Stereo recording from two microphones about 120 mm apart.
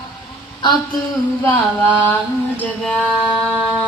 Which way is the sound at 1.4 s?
15° left (ahead or behind).